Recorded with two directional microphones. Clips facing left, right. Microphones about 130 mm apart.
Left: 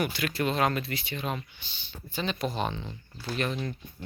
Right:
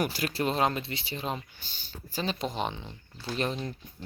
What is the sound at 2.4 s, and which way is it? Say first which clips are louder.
Speech: left 1 dB; 15° right (ahead or behind).